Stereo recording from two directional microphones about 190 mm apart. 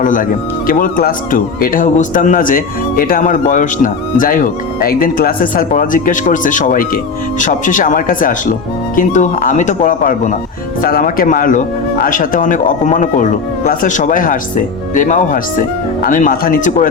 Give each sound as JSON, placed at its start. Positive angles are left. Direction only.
{"t": 0.0, "sound": "speech", "side_deg": 45}